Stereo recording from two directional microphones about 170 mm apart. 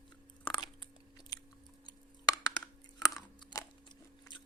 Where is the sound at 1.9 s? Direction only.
20° left (ahead or behind).